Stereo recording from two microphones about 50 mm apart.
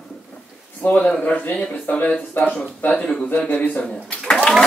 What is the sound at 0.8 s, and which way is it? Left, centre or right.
A woman's voice, left.